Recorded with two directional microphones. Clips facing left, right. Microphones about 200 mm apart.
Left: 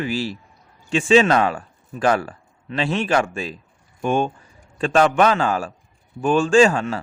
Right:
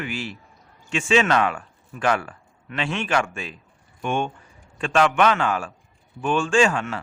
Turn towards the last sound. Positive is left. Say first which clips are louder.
# left 5 dB
turn(degrees=35)  # may be behind; listen again after turning